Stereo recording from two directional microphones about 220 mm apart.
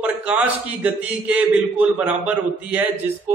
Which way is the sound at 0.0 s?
5° right (ahead or behind).